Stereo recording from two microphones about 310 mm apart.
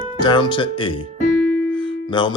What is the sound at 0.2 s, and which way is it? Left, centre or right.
Speech, centre.